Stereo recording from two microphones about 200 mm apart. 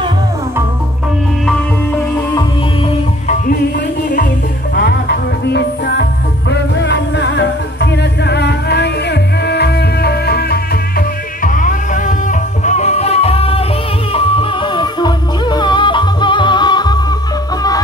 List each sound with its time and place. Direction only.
4.7 s music: 55° left (ahead or behind); by 17.0 s 20° left (ahead or behind)